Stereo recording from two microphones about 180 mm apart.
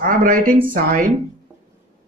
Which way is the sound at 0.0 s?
50° right (ahead or behind).